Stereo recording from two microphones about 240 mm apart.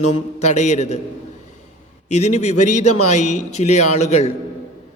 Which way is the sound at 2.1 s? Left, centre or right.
Left.